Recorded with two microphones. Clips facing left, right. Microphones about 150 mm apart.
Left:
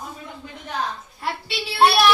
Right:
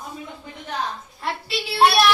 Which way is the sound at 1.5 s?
Centre (ahead or behind).